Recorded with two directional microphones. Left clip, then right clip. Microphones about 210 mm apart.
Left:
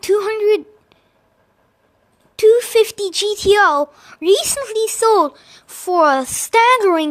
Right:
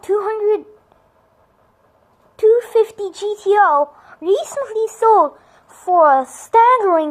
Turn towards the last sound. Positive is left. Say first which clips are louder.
# even
turn(degrees=60)  # may be behind; listen again after turning